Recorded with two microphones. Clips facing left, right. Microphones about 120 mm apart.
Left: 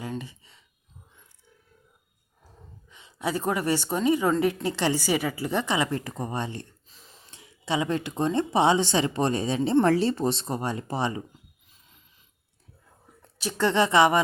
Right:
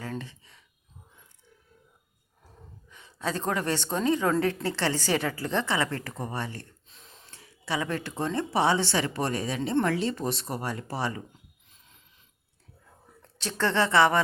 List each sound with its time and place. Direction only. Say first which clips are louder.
0.0 s a sound: left 2 dB; 15° left (ahead or behind)
2.9 s a woman's voice: left 3 dB; 15° left (ahead or behind)
6.8 s a sound: even; centre (ahead or behind)
7.3 s speech: left 4 dB; 20° left (ahead or behind)
9.8 s speech: left 5 dB; 35° left (ahead or behind)
13.2 s speech: left 3 dB; 15° left (ahead or behind)